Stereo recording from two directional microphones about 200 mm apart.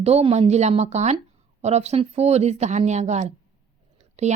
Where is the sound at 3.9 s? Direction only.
35° right (ahead or behind).